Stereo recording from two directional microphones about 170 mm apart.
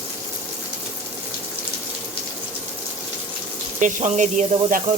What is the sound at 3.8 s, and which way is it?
Sizzle, 50° right (ahead or behind).